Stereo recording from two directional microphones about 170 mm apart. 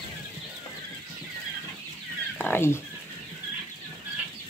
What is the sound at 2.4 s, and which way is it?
Speech, 15° left (ahead or behind).